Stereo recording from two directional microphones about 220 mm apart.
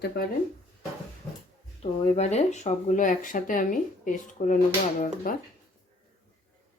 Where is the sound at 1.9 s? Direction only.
25° left (ahead or behind).